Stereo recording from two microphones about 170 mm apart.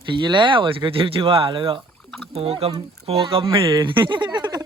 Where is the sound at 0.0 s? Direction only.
25° right (ahead or behind).